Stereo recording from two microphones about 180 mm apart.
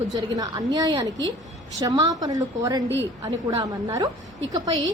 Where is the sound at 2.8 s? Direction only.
90° right.